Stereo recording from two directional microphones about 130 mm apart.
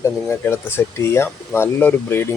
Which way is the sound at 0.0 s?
20° left (ahead or behind).